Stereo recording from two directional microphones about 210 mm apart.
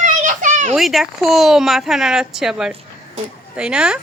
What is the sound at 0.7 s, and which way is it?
Speech, centre (ahead or behind).